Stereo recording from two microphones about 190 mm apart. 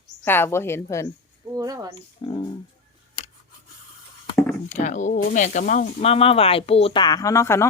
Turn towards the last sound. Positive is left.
turn(degrees=15)  # may be behind; listen again after turning